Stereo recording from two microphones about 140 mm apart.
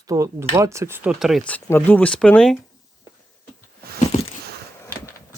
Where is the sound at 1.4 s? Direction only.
15° left (ahead or behind).